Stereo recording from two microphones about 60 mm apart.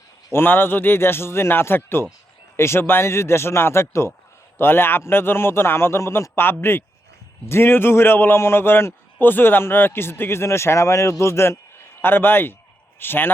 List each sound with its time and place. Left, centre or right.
0.3 s a man's voice: left
12.0 s a man's voice: left